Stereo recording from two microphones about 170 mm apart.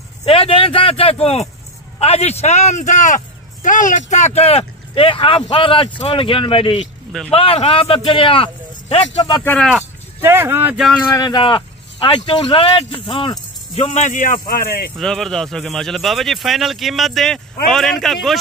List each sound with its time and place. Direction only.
0.2 s speech: 35° left (ahead or behind)
7.1 s speech: centre (ahead or behind)
7.3 s speech: 35° left (ahead or behind)
9.4 s speech: 10° left (ahead or behind)
10.2 s speech: 15° right (ahead or behind)
11.1 s speech: 25° left (ahead or behind); by 14.9 s 65° left (ahead or behind)
15.0 s speech: centre (ahead or behind)